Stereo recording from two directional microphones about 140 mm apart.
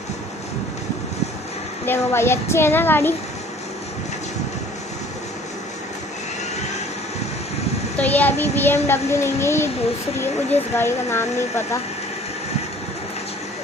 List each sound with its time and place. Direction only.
1.8 s a child's voice: 15° left (ahead or behind)
7.9 s a child's voice: 10° left (ahead or behind)